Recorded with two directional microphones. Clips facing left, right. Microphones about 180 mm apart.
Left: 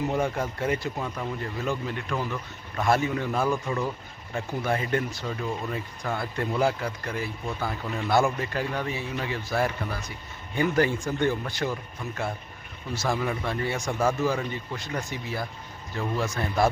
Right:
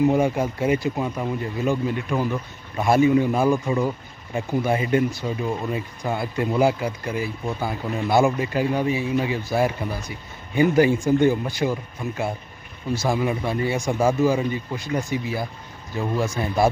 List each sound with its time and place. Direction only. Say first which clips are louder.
0.0 s speech: right 7 dB; 15° right (ahead or behind)